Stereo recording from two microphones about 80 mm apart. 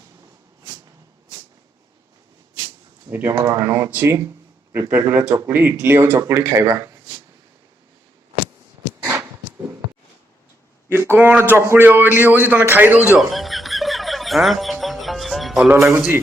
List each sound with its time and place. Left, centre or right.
3.1 s a man's voice: right
3.3 s speech: right
3.6 s a man's voice: right
9.0 s a sound: right
10.8 s a sound: right
11.4 s a man's voice: right
13.1 s music: centre
15.8 s a man's voice: centre